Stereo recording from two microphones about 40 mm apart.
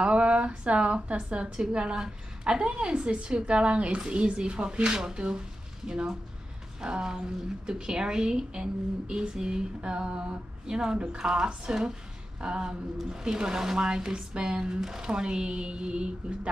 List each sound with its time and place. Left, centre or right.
0.0 s a woman's voice: right